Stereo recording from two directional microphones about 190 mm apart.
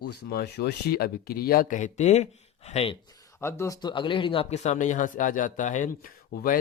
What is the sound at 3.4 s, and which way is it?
Speech, 15° left (ahead or behind).